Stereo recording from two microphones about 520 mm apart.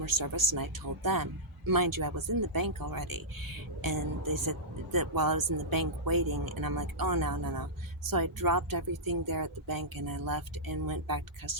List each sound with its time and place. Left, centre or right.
0.2 s speech: right